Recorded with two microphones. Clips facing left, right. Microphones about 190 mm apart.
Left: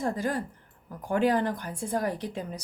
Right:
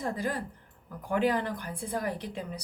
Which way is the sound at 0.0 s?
45° left (ahead or behind).